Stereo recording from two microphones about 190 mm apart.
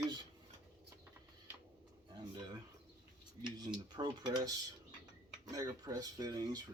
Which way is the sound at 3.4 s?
20° right (ahead or behind).